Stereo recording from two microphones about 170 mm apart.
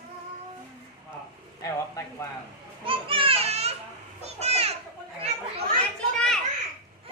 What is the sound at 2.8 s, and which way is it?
Children playing, 30° right (ahead or behind).